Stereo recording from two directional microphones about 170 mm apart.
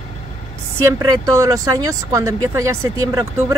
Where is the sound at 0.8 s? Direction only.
20° right (ahead or behind).